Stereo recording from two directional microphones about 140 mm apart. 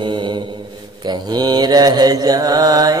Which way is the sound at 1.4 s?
30° right (ahead or behind).